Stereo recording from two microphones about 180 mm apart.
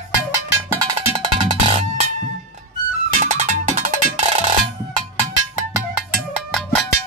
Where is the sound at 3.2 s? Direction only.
40° right (ahead or behind).